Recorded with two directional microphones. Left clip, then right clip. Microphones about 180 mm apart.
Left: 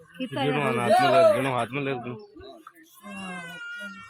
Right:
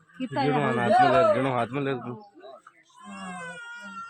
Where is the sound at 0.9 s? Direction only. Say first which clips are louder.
Left 1 dB; 50° left (ahead or behind).